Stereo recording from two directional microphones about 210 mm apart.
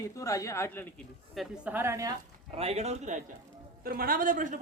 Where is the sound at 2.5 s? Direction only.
30° right (ahead or behind).